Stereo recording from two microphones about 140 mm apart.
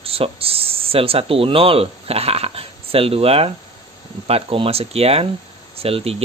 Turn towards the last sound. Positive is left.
turn(degrees=-45)  # may be behind; listen again after turning